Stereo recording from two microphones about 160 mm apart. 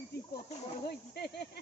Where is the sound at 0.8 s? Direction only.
80° left.